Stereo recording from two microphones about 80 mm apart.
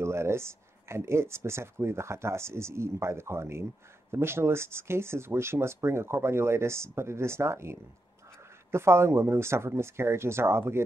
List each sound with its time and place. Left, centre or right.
0.0 s speech: right